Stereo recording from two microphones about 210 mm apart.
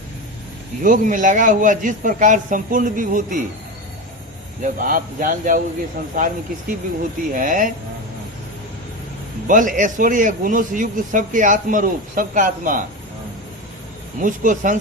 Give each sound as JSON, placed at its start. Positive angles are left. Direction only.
{"t": 0.9, "sound": "a man's voice", "side_deg": -40}
{"t": 4.6, "sound": "a man's voice", "side_deg": -40}
{"t": 9.5, "sound": "a man's voice", "side_deg": -40}
{"t": 14.2, "sound": "a man's voice", "side_deg": -40}